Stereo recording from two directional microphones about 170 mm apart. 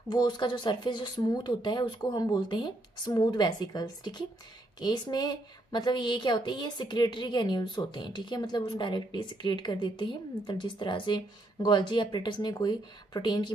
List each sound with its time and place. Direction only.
0.1 s a woman's voice: 25° left (ahead or behind)